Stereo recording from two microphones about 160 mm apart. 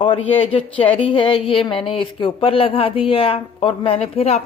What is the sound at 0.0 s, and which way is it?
A woman's voice, 35° left (ahead or behind).